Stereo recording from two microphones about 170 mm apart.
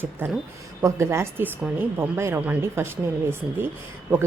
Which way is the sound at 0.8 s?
15° right (ahead or behind).